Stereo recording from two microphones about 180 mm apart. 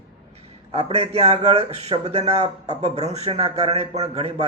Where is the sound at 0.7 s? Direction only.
35° right (ahead or behind).